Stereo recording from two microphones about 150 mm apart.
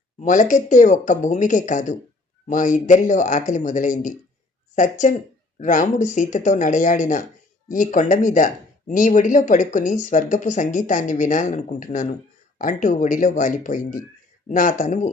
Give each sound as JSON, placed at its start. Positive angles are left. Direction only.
{"t": 0.2, "sound": "speech", "side_deg": 55}